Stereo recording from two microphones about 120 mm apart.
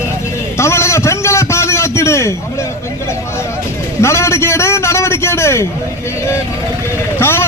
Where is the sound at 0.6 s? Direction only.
25° left (ahead or behind).